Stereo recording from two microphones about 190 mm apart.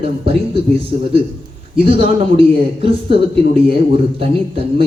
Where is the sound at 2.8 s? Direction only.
30° right (ahead or behind).